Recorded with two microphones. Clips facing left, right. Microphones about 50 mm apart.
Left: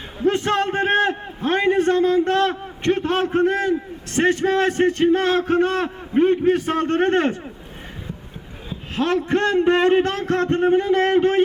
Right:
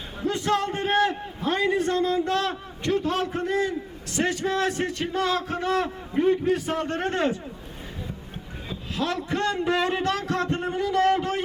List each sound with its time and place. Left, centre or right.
0.3 s a man's voice: left
9.0 s a man's voice: left